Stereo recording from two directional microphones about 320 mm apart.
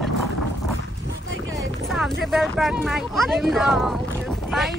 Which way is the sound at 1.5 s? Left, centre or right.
Centre.